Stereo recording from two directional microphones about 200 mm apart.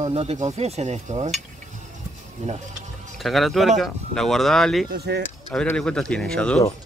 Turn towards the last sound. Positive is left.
turn(degrees=5)  # may be behind; listen again after turning